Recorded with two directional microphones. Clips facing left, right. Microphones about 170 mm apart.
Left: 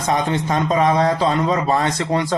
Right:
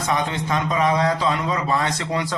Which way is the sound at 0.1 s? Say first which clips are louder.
Left 4 dB; 40° left (ahead or behind).